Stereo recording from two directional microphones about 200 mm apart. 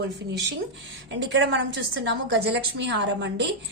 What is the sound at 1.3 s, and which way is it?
Speech, 65° right (ahead or behind).